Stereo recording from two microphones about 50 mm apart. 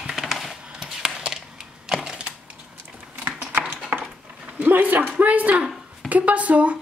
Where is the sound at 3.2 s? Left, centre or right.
Right.